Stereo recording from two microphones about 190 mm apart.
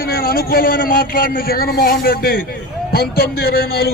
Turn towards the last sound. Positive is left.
turn(degrees=55)  # may be behind; listen again after turning